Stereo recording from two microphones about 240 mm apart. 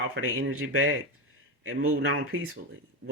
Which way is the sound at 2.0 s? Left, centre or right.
Right.